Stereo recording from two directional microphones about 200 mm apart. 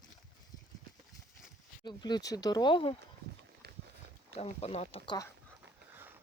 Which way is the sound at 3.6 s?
55° right (ahead or behind).